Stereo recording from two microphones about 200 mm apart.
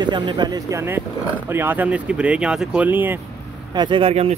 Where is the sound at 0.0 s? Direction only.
20° right (ahead or behind).